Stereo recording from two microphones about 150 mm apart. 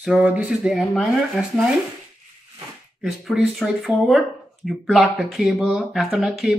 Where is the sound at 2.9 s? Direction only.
Centre (ahead or behind).